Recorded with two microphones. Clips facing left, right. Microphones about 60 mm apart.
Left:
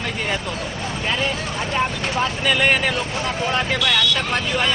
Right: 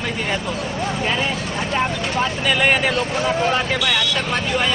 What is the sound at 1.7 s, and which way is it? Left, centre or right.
Speech, centre.